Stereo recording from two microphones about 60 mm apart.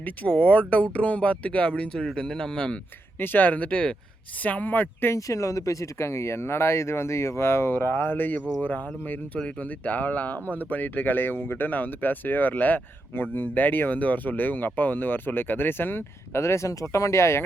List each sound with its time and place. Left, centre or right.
0.0 s speech: left
3.2 s speech: left
4.4 s speech: left
5.1 s speech: left
16.4 s speech: left